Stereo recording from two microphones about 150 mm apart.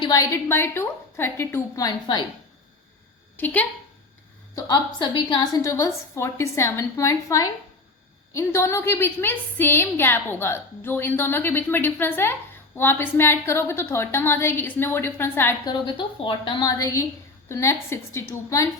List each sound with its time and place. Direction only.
0.0 s a woman's voice: 25° left (ahead or behind)
3.3 s a woman's voice: 10° left (ahead or behind)
4.9 s a woman's voice: 30° left (ahead or behind); by 15.5 s 15° left (ahead or behind)
15.6 s a woman's voice: 30° left (ahead or behind)